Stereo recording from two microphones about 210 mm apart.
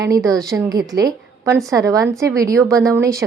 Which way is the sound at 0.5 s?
15° right (ahead or behind).